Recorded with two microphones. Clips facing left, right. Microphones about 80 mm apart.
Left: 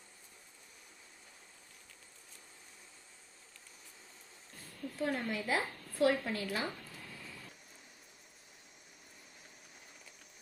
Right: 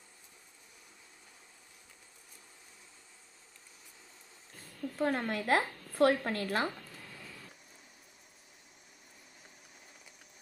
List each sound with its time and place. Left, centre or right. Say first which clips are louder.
4.9 s a woman's voice: right 4 dB; right